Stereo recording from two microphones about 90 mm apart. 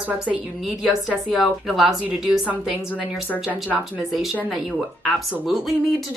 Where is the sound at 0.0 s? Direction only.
15° right (ahead or behind).